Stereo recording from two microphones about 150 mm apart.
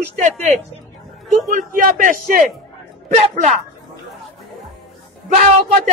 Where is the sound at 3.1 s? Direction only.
50° right (ahead or behind).